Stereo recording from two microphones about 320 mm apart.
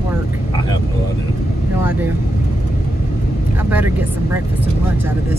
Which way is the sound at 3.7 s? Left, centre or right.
Centre.